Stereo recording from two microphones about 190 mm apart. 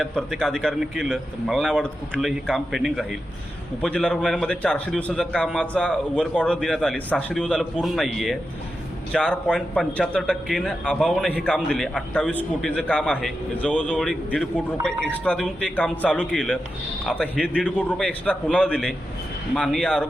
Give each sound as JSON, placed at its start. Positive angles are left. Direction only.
{"t": 0.0, "sound": "a man's voice", "side_deg": 0}